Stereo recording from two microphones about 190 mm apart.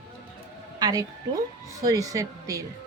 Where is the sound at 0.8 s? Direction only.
20° right (ahead or behind).